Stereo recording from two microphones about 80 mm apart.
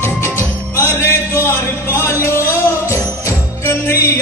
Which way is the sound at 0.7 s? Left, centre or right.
Left.